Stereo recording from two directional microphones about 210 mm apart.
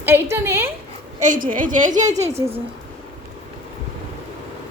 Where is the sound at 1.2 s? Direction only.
40° right (ahead or behind).